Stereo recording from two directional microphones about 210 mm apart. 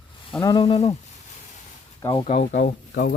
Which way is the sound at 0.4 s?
25° left (ahead or behind).